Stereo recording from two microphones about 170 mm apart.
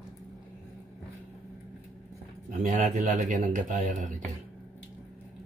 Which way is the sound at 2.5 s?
45° right (ahead or behind).